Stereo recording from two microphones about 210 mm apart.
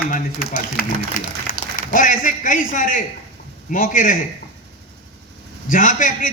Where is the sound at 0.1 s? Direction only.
40° left (ahead or behind).